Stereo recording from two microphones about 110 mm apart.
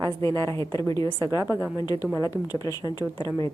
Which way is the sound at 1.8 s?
35° left (ahead or behind).